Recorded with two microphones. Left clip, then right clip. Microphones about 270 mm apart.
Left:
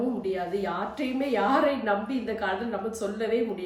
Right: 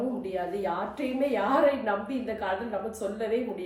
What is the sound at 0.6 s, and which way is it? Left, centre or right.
A woman's voice, centre.